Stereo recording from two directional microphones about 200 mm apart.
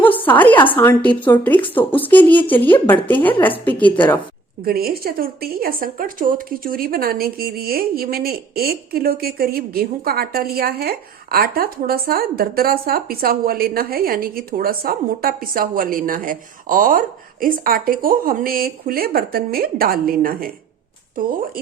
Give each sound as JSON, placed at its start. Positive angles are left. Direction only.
{"t": 0.0, "sound": "a sound", "side_deg": 10}
{"t": 0.7, "sound": "a woman's voice", "side_deg": 10}
{"t": 4.6, "sound": "a woman's voice", "side_deg": -50}